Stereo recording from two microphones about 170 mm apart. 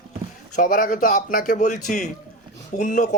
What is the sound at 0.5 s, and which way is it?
Speech, 55° left (ahead or behind).